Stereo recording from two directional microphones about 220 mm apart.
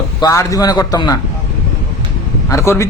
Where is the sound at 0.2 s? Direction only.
15° left (ahead or behind).